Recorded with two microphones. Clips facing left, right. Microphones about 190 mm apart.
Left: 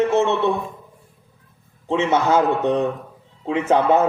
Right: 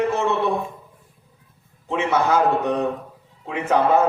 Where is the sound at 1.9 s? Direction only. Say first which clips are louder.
Left 2 dB; 25° left (ahead or behind).